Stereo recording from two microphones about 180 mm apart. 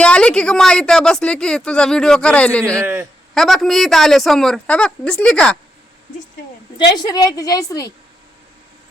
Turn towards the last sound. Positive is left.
turn(degrees=20)  # may be behind; listen again after turning